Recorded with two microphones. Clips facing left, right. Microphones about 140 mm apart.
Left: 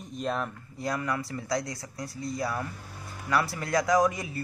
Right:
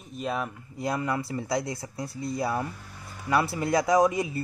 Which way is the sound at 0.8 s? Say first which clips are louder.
Right 2 dB; 25° right (ahead or behind).